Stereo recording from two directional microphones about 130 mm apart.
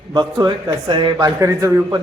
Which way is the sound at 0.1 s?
35° right (ahead or behind).